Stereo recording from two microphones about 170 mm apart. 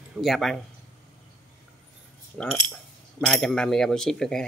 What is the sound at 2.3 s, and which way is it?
Speech, 5° left (ahead or behind).